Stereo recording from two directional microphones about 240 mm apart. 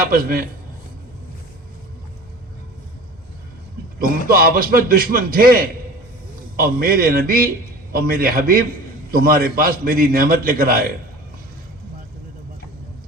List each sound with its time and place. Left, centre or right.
0.0 s a man's voice: right
4.3 s a man's voice: right